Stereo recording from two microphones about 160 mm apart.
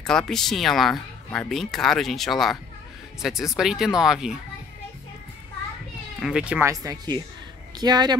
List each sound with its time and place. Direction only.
0.0 s speech: 5° left (ahead or behind)
6.1 s speech: 5° right (ahead or behind)
6.7 s speech: 20° right (ahead or behind)